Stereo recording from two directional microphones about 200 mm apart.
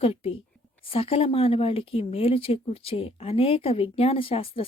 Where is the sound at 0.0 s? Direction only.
30° left (ahead or behind).